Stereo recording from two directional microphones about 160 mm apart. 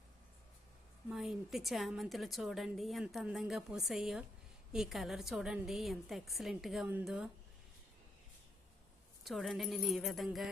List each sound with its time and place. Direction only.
1.1 s a woman's voice: 5° right (ahead or behind)
9.2 s a woman's voice: centre (ahead or behind)